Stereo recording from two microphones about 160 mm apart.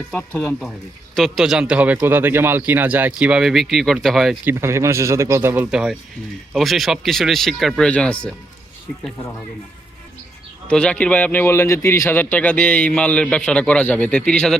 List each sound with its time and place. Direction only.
0.1 s a man's voice: 10° left (ahead or behind)
4.4 s speech: 15° right (ahead or behind)
5.7 s a man's voice: 5° right (ahead or behind)
10.7 s a man's voice: 5° left (ahead or behind)